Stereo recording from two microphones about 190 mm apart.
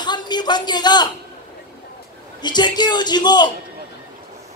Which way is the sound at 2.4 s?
20° left (ahead or behind).